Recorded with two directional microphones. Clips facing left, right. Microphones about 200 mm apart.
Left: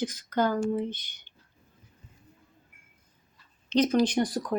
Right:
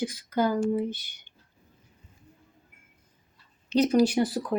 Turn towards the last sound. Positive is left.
turn(degrees=-5)  # may be behind; listen again after turning